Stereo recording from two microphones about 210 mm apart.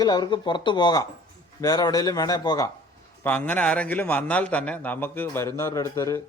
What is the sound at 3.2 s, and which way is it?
A man's voice, 5° left (ahead or behind).